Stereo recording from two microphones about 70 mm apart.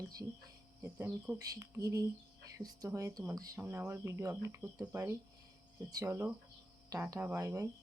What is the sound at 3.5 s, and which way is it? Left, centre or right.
Speech, right.